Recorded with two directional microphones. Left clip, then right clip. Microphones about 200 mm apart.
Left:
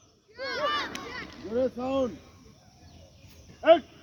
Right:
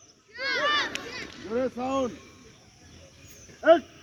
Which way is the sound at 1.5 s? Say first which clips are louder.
Even; 40° right (ahead or behind).